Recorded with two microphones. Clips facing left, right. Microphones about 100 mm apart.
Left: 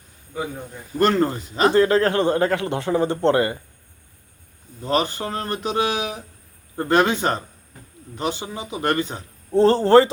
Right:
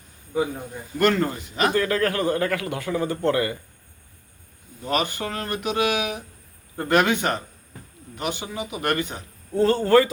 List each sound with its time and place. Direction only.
0.9 s speech: 30° left (ahead or behind)
4.8 s speech: 30° left (ahead or behind)